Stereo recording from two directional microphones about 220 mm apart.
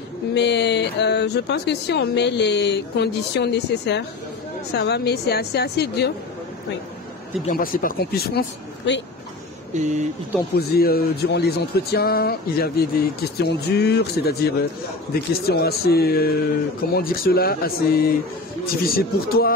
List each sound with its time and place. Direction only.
0.3 s speech: 50° left (ahead or behind)
7.4 s speech: 40° left (ahead or behind)
9.8 s speech: 35° right (ahead or behind)
10.7 s speech: 45° left (ahead or behind)